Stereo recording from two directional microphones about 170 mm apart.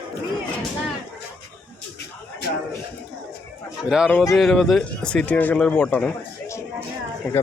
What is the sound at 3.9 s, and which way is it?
Speech, 5° right (ahead or behind).